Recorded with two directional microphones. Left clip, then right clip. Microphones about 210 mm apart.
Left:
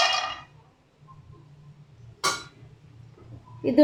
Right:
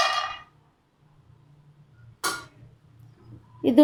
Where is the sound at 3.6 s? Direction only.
35° right (ahead or behind).